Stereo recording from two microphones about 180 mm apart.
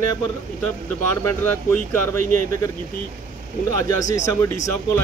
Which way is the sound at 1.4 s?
10° left (ahead or behind).